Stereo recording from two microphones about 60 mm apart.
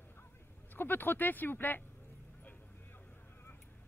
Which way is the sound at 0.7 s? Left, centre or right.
Left.